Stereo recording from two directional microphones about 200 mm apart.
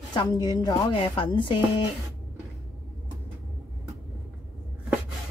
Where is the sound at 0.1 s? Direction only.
20° left (ahead or behind).